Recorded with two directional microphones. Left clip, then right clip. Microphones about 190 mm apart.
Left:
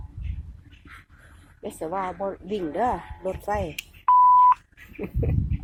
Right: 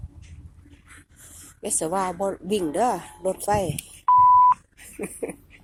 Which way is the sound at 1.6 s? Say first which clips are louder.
Right 4 dB; 20° right (ahead or behind).